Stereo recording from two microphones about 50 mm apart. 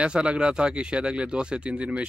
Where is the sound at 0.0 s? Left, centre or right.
Right.